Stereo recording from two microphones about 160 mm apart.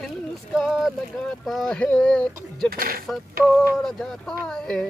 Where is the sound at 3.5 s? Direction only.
5° left (ahead or behind).